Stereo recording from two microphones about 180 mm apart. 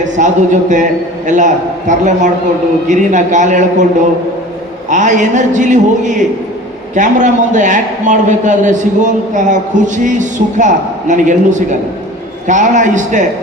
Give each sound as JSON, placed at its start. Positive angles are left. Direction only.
{"t": 0.2, "sound": "a man's voice", "side_deg": -45}
{"t": 1.9, "sound": "a man's voice", "side_deg": -45}
{"t": 4.9, "sound": "a man's voice", "side_deg": -45}